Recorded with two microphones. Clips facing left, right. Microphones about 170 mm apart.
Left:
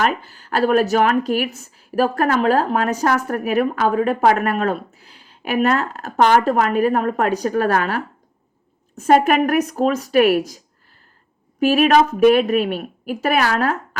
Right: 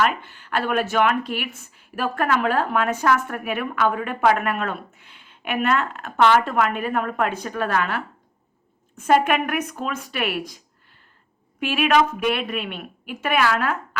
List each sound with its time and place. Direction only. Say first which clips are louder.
0.0 s speech: left 2 dB; 40° left (ahead or behind)
11.6 s speech: left 5 dB; 40° left (ahead or behind)